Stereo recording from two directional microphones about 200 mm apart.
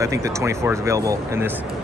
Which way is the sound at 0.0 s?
15° right (ahead or behind).